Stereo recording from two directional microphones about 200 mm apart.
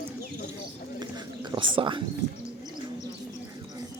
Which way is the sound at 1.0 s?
20° right (ahead or behind).